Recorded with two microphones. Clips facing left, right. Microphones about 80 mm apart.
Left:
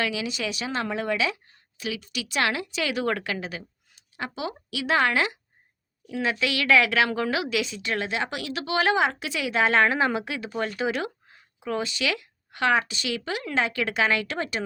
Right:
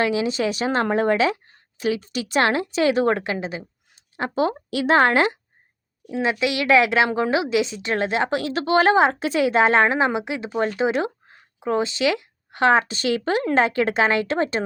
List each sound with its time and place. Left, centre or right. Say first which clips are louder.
0.0 s a woman's voice: right 7 dB; right
6.1 s a woman's voice: right 4 dB; right
10.8 s a sound: right 6 dB; right
12.9 s a woman's voice: right 8 dB; right